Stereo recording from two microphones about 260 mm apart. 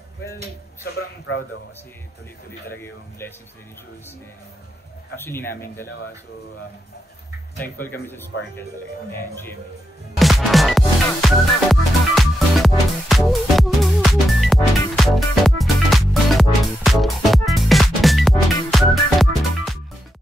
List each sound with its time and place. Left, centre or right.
0.8 s a man's voice: left
2.7 s speech: centre
5.1 s speech: centre
7.9 s speech: centre
10.1 s music: centre